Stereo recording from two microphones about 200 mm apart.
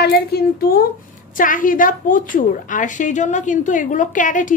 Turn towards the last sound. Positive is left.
turn(degrees=40)  # may be behind; listen again after turning